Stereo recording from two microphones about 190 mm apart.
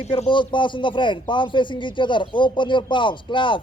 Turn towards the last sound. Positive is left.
turn(degrees=25)  # may be behind; listen again after turning